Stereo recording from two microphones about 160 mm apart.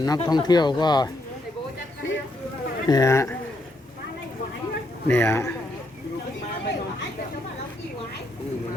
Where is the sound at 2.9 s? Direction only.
20° left (ahead or behind).